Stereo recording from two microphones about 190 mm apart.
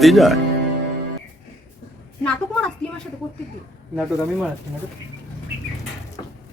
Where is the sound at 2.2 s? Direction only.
5° left (ahead or behind).